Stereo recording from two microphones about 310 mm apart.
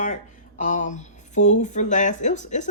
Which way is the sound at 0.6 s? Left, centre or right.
Left.